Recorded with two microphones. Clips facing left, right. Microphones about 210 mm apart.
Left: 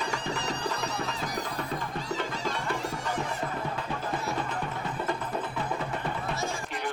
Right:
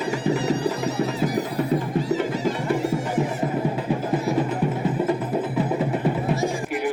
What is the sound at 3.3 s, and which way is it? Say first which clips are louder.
Music: right 9 dB; 20° right (ahead or behind).